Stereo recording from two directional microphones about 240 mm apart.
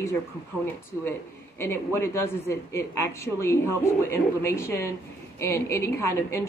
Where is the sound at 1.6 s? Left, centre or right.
Centre.